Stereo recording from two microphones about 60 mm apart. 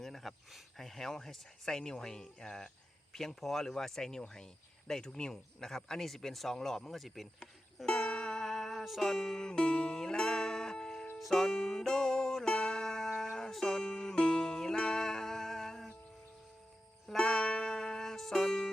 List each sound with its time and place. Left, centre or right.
0.0 s speech: centre
7.9 s music: centre
17.1 s music: centre